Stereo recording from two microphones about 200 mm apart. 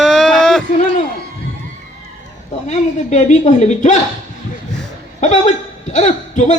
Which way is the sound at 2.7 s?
35° left (ahead or behind).